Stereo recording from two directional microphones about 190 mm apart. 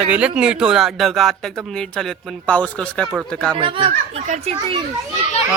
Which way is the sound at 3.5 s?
25° right (ahead or behind).